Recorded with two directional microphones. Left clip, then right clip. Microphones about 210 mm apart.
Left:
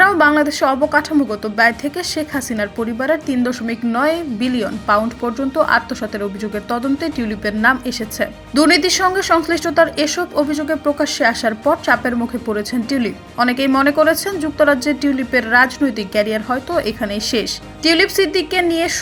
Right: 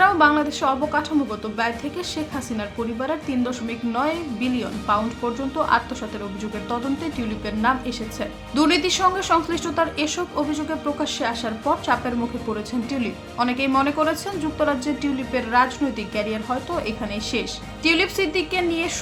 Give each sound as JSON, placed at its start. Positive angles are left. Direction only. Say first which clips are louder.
{"t": 0.0, "sound": "a woman's voice", "louder": "left 5 dB", "side_deg": 25}